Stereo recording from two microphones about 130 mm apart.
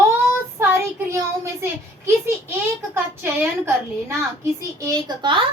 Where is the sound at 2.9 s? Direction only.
15° right (ahead or behind).